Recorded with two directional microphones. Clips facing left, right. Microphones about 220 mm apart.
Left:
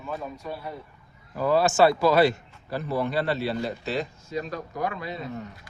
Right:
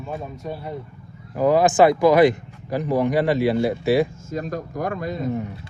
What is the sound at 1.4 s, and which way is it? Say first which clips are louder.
Speech: right 4 dB; 15° right (ahead or behind).